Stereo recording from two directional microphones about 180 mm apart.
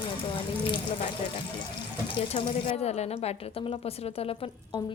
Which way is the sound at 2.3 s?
35° left (ahead or behind).